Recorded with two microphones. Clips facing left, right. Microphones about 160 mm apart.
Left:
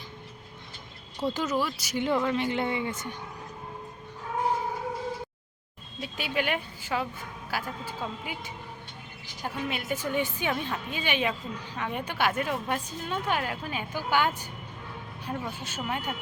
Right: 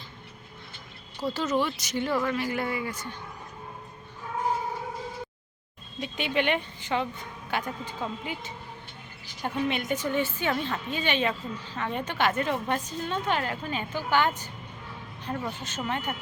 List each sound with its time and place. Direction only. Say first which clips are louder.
1.3 s a woman's voice: right 2 dB; 15° left (ahead or behind)
1.5 s a woman's voice: right 2 dB; 5° left (ahead or behind)
2.0 s a woman's voice: left 2 dB; 20° left (ahead or behind)
6.0 s a woman's voice: right 3 dB; 5° left (ahead or behind)